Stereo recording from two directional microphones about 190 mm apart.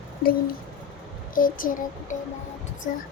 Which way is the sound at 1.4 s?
45° left (ahead or behind).